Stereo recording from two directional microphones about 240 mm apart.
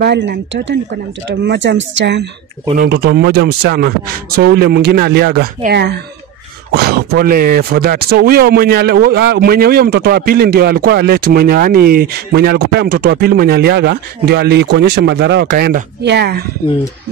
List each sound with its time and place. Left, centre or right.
0.0 s speech: right